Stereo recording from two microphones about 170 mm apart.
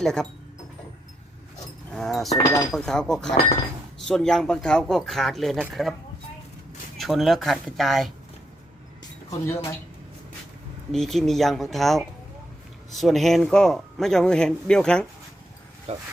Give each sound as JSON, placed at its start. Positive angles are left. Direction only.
{"t": 0.0, "sound": "a man's voice", "side_deg": 5}
{"t": 1.9, "sound": "a man's voice", "side_deg": 0}
{"t": 7.0, "sound": "a man's voice", "side_deg": 0}
{"t": 10.9, "sound": "a man's voice", "side_deg": 0}
{"t": 15.9, "sound": "speech", "side_deg": -35}